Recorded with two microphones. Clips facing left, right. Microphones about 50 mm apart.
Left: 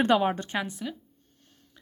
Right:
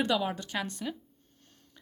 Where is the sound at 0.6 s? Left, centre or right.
Centre.